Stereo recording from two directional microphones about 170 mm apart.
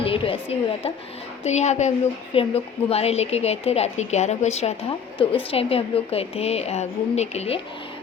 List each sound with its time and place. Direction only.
0.0 s a woman's voice: 30° left (ahead or behind)